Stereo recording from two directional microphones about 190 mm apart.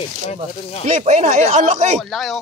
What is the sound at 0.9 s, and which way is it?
Speech, 40° right (ahead or behind).